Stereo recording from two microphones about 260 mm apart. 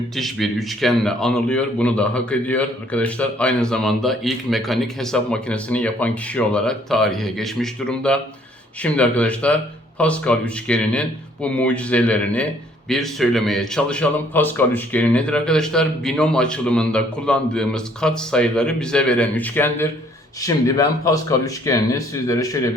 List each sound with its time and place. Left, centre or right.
0.2 s speech: centre